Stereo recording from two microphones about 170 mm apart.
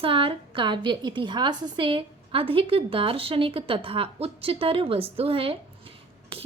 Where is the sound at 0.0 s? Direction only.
30° right (ahead or behind).